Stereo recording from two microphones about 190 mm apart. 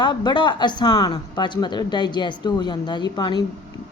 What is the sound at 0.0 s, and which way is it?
Speech, 25° left (ahead or behind).